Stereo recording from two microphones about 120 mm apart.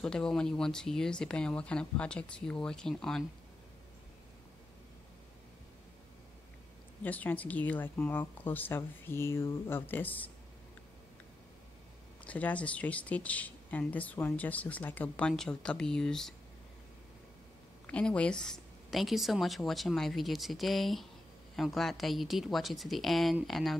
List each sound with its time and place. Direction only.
0.0 s speech: 5° left (ahead or behind)
7.0 s speech: 15° left (ahead or behind)
12.3 s speech: 10° left (ahead or behind)
17.8 s a woman's voice: 10° left (ahead or behind)